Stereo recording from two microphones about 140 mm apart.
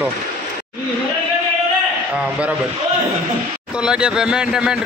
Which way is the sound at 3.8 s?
5° right (ahead or behind).